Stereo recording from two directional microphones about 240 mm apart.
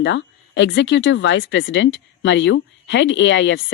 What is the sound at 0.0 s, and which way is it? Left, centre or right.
Speech, left.